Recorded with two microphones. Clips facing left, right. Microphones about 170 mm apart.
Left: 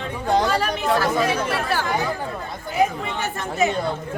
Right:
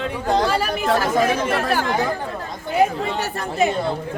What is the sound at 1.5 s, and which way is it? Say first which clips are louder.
Speech: right 3 dB; 55° right (ahead or behind).